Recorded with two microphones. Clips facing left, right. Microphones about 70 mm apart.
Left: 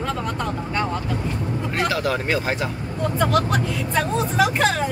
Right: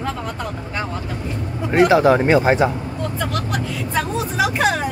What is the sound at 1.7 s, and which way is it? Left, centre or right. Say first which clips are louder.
Speech: right 11 dB; right.